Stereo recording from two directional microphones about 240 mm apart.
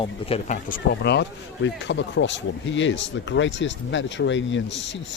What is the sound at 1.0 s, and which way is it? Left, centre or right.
Speech, left.